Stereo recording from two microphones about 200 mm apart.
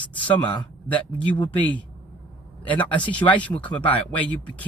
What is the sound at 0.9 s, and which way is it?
Speech, 5° left (ahead or behind).